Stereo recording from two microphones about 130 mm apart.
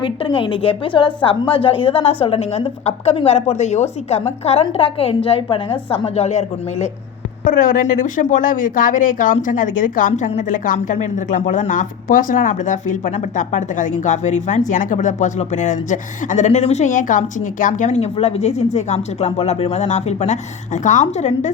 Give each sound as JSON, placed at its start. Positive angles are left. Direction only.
{"t": 0.0, "sound": "a woman's voice", "side_deg": 40}
{"t": 4.6, "sound": "a woman's voice", "side_deg": 45}
{"t": 6.1, "sound": "speech", "side_deg": 60}
{"t": 7.4, "sound": "speech", "side_deg": 90}